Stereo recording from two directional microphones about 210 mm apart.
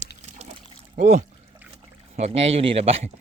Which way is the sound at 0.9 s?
35° right (ahead or behind).